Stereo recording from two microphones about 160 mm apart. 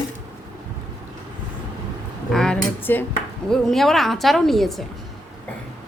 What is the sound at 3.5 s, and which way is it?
Speech, centre (ahead or behind).